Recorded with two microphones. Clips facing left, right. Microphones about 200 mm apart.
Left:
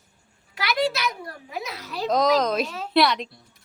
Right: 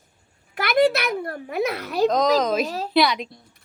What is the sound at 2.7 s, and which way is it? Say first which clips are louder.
Speech: right 5 dB; 35° right (ahead or behind).